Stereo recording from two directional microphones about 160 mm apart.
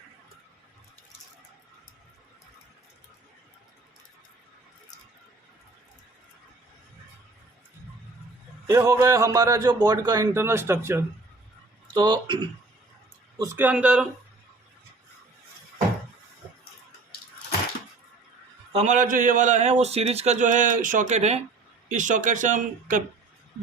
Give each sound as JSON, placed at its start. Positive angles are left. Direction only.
{"t": 8.6, "sound": "a man's voice", "side_deg": -20}
{"t": 11.9, "sound": "a man's voice", "side_deg": -30}
{"t": 13.6, "sound": "speech", "side_deg": -10}
{"t": 18.7, "sound": "a man's voice", "side_deg": -45}